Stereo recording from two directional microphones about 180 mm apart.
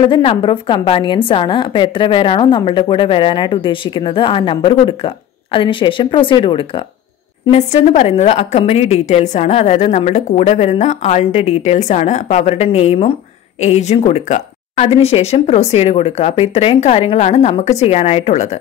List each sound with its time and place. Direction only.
0.0 s a woman's voice: 30° left (ahead or behind)